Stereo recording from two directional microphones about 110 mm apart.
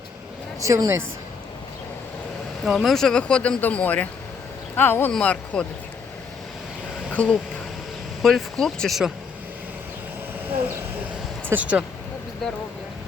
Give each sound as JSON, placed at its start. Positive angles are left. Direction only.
{"t": 0.6, "sound": "speech", "side_deg": -30}
{"t": 2.6, "sound": "speech", "side_deg": 0}
{"t": 7.1, "sound": "speech", "side_deg": 10}
{"t": 8.2, "sound": "speech", "side_deg": 0}
{"t": 11.4, "sound": "speech", "side_deg": -15}